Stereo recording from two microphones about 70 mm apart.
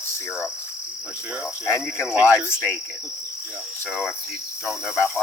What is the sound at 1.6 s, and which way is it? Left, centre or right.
Cricket, left.